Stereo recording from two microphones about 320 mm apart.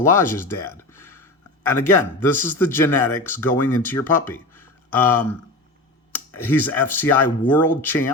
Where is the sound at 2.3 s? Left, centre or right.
Centre.